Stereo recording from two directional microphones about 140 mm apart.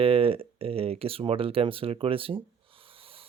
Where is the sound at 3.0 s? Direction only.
40° right (ahead or behind).